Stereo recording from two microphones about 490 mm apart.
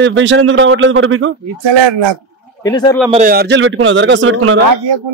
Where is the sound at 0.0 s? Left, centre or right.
Right.